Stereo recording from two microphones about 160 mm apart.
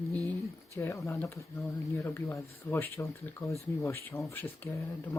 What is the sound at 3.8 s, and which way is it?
Speech, 15° left (ahead or behind).